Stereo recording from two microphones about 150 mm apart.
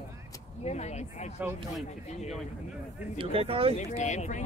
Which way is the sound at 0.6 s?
50° left (ahead or behind).